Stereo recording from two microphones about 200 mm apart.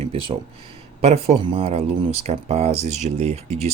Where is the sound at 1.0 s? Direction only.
30° right (ahead or behind).